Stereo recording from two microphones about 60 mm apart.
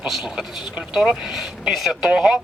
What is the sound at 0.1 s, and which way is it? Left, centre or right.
Speech, centre.